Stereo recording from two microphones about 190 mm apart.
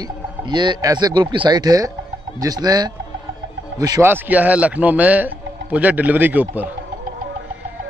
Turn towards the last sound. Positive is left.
turn(degrees=-10)  # may be behind; listen again after turning